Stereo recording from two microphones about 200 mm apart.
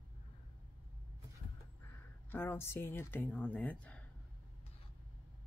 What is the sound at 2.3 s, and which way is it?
Speech, 10° left (ahead or behind).